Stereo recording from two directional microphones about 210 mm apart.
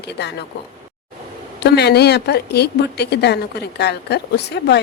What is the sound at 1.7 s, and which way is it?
A woman's voice, 50° left (ahead or behind).